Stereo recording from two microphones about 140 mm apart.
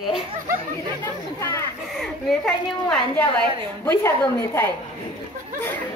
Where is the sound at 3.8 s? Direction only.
20° left (ahead or behind).